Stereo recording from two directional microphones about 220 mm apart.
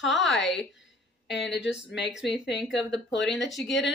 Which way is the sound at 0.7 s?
55° left (ahead or behind).